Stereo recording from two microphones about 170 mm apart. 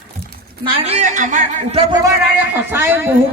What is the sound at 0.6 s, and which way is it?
A man's voice, 35° right (ahead or behind).